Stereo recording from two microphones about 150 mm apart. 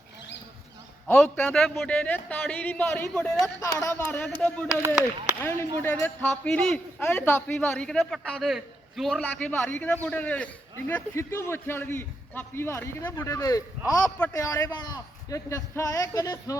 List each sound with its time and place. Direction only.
1.0 s a man's voice: 10° left (ahead or behind)
11.1 s a man's voice: 20° left (ahead or behind)